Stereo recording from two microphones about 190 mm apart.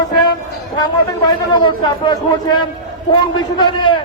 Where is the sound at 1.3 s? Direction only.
25° left (ahead or behind).